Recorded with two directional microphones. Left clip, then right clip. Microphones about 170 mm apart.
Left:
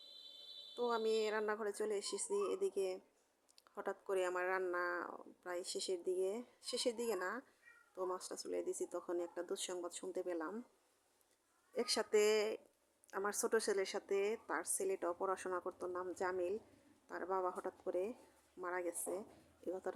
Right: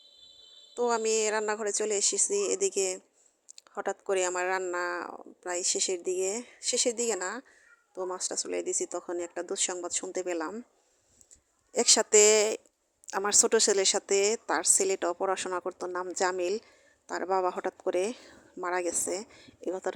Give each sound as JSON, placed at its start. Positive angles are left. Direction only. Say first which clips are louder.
{"t": 0.7, "sound": "speech", "louder": "right 10 dB", "side_deg": -35}
{"t": 11.7, "sound": "speech", "louder": "right 13 dB", "side_deg": -40}